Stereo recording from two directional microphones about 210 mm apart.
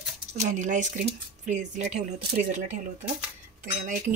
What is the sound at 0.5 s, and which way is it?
Speech, 35° right (ahead or behind).